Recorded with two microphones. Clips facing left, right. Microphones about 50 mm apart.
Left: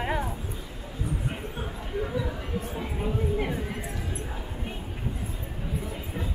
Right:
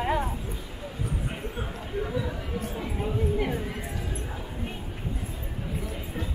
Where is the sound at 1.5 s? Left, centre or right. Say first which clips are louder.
Right 1 dB; centre.